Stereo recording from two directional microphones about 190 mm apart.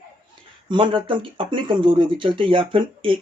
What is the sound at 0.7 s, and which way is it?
Speech, 25° right (ahead or behind).